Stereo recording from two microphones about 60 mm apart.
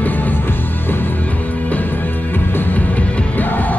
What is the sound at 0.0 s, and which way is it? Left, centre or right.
Music, left.